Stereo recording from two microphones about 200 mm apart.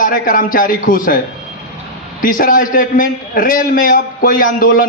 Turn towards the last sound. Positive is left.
turn(degrees=45)  # may be behind; listen again after turning